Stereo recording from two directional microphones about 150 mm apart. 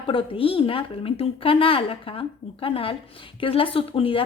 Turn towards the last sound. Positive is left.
turn(degrees=35)  # may be behind; listen again after turning